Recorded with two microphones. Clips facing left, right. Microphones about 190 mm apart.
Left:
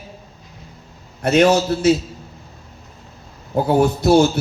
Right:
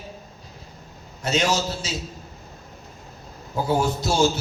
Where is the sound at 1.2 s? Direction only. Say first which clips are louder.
Left 9 dB; 60° left (ahead or behind).